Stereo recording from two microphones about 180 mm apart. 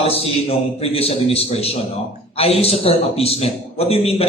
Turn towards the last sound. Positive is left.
turn(degrees=35)  # may be behind; listen again after turning